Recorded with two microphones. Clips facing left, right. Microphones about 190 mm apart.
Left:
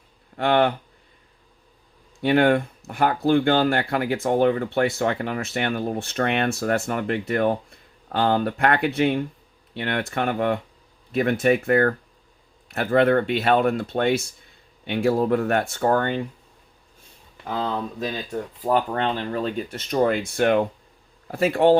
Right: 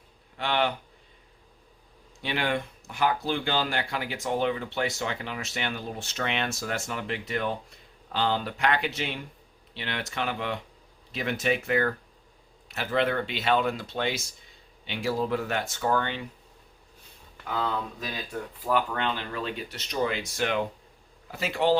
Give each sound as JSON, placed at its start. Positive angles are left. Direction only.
{"t": 0.3, "sound": "speech", "side_deg": 55}
{"t": 2.2, "sound": "speech", "side_deg": 55}
{"t": 17.4, "sound": "speech", "side_deg": 30}